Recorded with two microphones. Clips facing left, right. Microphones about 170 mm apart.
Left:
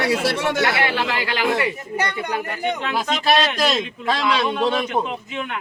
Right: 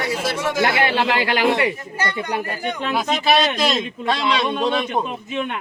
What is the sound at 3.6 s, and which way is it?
Speech, centre (ahead or behind).